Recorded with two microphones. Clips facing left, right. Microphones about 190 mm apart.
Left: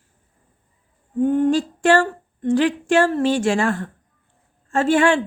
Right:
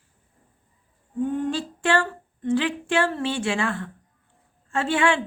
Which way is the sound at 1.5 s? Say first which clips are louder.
Left 8 dB; 45° left (ahead or behind).